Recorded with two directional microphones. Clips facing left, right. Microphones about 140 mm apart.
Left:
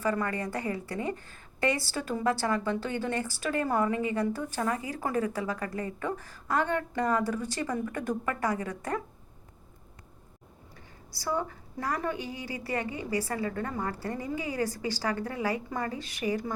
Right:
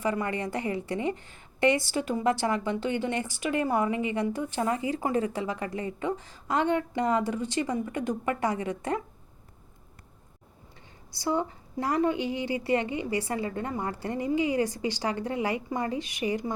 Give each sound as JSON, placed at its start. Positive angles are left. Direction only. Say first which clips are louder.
{"t": 0.0, "sound": "a woman's voice", "louder": "right 1 dB", "side_deg": -20}
{"t": 11.1, "sound": "a woman's voice", "louder": "right 3 dB", "side_deg": -20}